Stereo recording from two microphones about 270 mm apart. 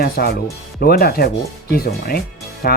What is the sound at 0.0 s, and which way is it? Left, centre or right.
Speech, left.